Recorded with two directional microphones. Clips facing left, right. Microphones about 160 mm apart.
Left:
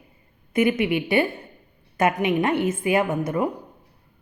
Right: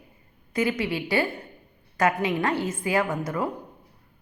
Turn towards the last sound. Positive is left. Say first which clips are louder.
# left 4 dB
turn(degrees=20)  # may be behind; listen again after turning